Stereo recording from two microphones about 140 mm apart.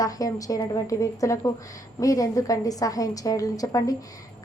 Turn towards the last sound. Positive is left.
turn(degrees=25)  # may be behind; listen again after turning